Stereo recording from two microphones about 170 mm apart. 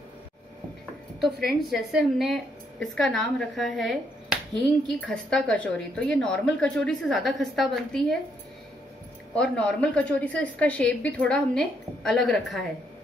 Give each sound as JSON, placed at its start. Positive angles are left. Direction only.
{"t": 1.2, "sound": "a woman's voice", "side_deg": 0}
{"t": 9.3, "sound": "a woman's voice", "side_deg": 5}